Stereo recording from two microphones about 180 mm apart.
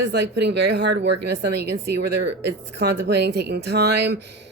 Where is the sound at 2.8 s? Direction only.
65° right (ahead or behind).